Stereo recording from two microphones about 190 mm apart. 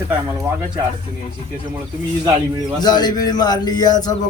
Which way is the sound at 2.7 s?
20° left (ahead or behind).